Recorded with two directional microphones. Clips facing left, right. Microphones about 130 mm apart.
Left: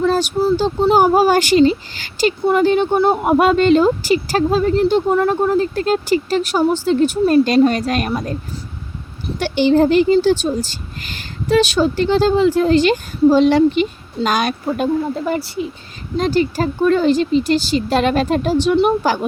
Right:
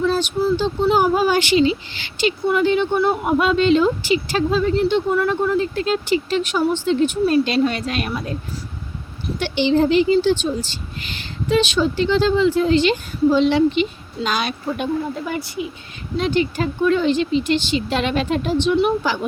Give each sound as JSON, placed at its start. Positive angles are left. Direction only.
{"t": 0.0, "sound": "a sound", "side_deg": 45}
{"t": 0.6, "sound": "speech", "side_deg": 45}
{"t": 9.4, "sound": "speech", "side_deg": 45}
{"t": 15.3, "sound": "speech", "side_deg": 35}